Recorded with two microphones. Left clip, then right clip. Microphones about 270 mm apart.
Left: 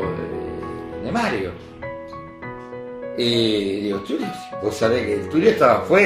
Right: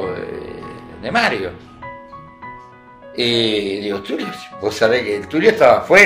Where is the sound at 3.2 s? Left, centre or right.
Right.